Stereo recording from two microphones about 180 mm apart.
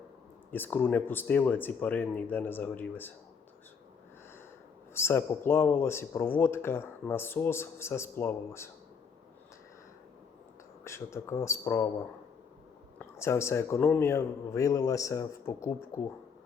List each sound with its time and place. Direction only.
0.5 s speech: 10° left (ahead or behind)
4.9 s speech: 15° left (ahead or behind)
10.8 s speech: 15° left (ahead or behind)
13.0 s speech: 15° left (ahead or behind)